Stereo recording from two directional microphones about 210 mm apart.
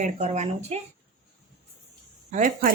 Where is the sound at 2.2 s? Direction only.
40° right (ahead or behind).